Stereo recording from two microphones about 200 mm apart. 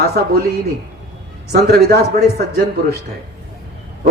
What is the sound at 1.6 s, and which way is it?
Speech, 55° right (ahead or behind).